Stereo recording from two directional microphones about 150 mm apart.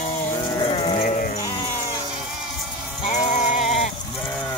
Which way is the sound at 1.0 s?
60° left (ahead or behind).